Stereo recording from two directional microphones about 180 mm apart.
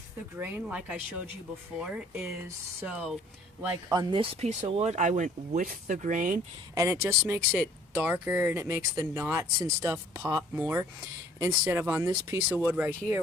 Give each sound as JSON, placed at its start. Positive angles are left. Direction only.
{"t": 0.3, "sound": "speech", "side_deg": -10}
{"t": 3.9, "sound": "speech", "side_deg": -30}
{"t": 6.7, "sound": "speech", "side_deg": -15}